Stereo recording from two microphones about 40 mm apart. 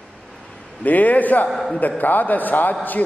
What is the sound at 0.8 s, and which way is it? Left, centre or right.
A man's voice, left.